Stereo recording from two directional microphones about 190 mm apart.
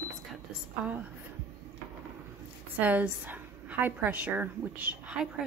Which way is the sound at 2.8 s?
10° right (ahead or behind).